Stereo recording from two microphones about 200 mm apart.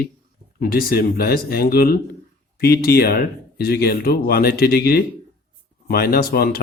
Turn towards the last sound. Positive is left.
turn(degrees=50)  # may be behind; listen again after turning